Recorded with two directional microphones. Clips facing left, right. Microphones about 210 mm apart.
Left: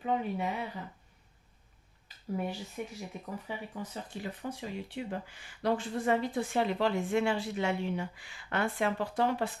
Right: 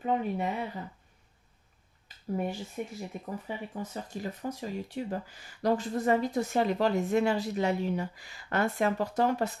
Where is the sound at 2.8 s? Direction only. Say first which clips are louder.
Right 3 dB; 40° right (ahead or behind).